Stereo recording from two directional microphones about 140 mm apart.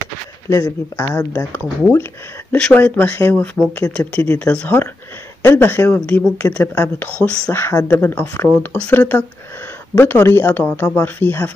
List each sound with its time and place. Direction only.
0.5 s speech: 20° left (ahead or behind)